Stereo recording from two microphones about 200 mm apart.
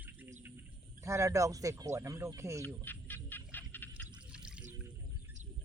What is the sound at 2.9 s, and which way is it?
Music, 10° left (ahead or behind).